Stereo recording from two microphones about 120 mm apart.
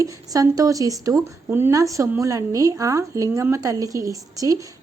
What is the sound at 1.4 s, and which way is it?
A woman's voice, 20° right (ahead or behind).